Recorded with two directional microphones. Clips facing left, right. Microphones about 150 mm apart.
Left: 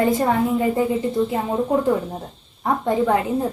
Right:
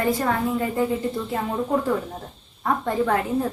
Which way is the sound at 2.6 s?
20° left (ahead or behind).